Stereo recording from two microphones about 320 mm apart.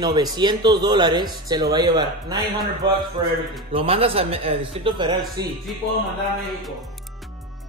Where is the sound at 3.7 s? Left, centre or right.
Centre.